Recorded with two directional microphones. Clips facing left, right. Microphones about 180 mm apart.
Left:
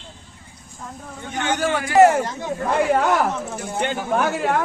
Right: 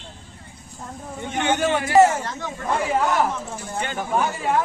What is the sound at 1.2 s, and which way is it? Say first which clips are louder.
Speech: right 1 dB; 25° right (ahead or behind).